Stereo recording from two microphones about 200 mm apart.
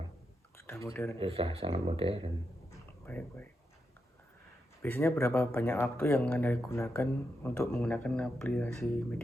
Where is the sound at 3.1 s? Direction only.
10° left (ahead or behind).